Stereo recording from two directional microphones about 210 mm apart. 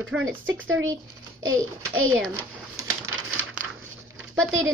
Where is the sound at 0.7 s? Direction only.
70° right (ahead or behind).